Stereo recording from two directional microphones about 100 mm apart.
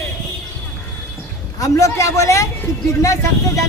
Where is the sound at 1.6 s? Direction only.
30° left (ahead or behind).